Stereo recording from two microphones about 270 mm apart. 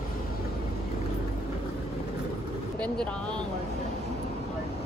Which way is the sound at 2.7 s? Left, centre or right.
Centre.